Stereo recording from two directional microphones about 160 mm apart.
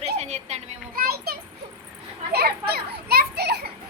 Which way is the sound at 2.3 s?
80° right.